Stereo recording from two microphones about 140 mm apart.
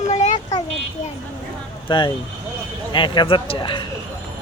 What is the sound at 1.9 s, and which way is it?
Speech, 35° left (ahead or behind).